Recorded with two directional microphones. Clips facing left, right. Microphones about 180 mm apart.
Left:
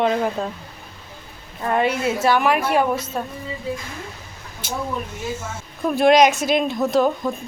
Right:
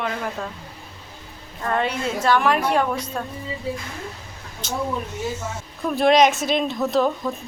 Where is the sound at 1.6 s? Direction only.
15° left (ahead or behind).